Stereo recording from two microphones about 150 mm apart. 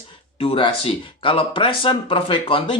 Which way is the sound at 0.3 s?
35° left (ahead or behind).